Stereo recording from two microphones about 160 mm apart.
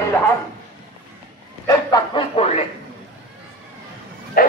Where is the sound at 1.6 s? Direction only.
25° left (ahead or behind).